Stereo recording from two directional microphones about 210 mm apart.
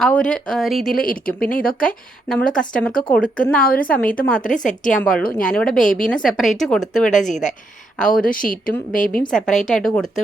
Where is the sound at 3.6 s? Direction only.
45° left (ahead or behind).